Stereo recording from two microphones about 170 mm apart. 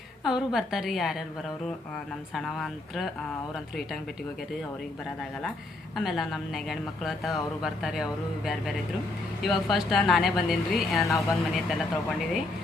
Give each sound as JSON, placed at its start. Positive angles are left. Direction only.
{"t": 0.3, "sound": "a woman's voice", "side_deg": 0}
{"t": 2.3, "sound": "a woman's voice", "side_deg": 0}
{"t": 6.0, "sound": "a woman's voice", "side_deg": 0}